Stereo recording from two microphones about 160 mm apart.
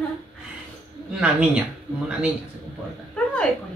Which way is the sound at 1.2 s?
5° right (ahead or behind).